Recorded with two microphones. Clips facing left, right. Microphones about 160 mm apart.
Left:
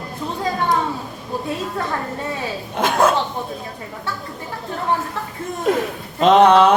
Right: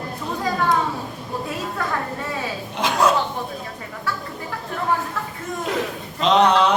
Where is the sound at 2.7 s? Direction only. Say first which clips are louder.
Left 3 dB; 50° left (ahead or behind).